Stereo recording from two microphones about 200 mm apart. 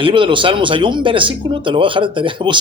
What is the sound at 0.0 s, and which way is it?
Speech, 25° right (ahead or behind).